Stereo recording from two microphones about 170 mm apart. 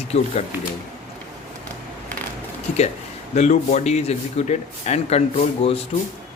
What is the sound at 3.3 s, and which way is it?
Speech, 45° left (ahead or behind).